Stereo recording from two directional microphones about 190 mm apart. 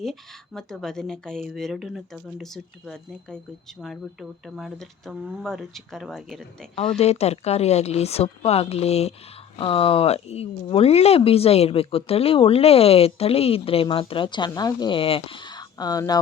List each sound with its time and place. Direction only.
0.0 s speech: centre (ahead or behind)
6.9 s speech: 35° left (ahead or behind)